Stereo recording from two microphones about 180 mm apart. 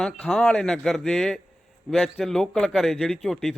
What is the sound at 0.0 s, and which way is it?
A man's voice, 5° left (ahead or behind).